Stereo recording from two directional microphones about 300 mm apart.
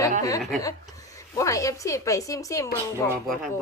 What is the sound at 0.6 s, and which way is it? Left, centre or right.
A woman's voice, centre.